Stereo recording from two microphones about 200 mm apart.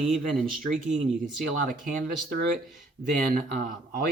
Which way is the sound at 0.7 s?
Centre (ahead or behind).